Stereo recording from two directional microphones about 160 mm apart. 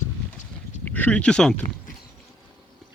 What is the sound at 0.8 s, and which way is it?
Speech, 10° left (ahead or behind).